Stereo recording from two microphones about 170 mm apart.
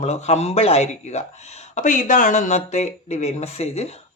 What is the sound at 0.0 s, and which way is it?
Speech, 40° left (ahead or behind).